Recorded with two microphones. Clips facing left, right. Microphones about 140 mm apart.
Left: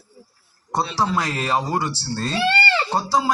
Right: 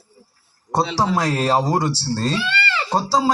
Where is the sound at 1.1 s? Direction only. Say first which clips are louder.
Right 4 dB; 35° right (ahead or behind).